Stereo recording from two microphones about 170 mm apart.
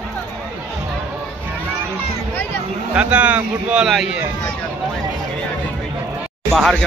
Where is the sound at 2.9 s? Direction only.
5° right (ahead or behind).